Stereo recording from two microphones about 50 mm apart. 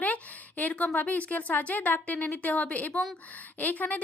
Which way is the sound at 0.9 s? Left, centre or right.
Left.